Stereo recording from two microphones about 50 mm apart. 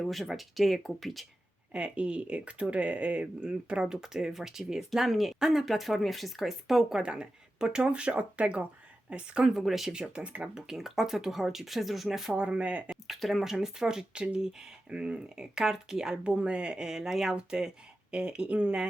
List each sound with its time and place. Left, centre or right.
0.0 s speech: centre
1.7 s speech: right
3.8 s speech: centre
7.0 s speech: centre
9.5 s speech: centre
9.9 s speech: centre
10.5 s speech: centre
12.4 s speech: right
12.9 s speech: centre
16.2 s speech: right